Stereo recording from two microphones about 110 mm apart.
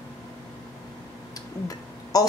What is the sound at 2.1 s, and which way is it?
Speech, 35° left (ahead or behind).